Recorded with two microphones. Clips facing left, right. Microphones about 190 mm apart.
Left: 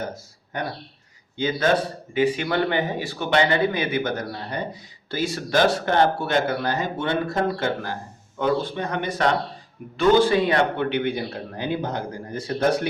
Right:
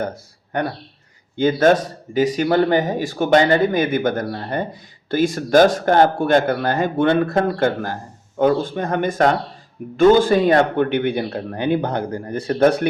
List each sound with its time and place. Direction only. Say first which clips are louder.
0.0 s speech: right 6 dB; 60° right (ahead or behind)